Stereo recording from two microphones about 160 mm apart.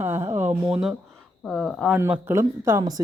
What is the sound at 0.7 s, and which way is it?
Speech, 5° right (ahead or behind).